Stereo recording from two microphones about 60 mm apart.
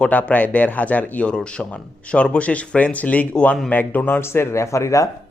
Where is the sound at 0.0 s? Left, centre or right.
Left.